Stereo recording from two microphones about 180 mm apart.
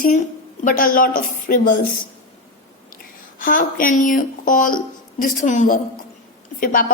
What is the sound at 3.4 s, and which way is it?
A woman's voice, 50° left (ahead or behind).